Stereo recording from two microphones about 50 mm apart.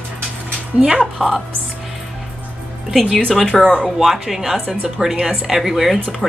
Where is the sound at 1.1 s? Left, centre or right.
Centre.